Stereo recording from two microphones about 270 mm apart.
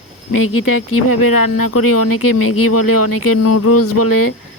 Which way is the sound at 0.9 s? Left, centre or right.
Left.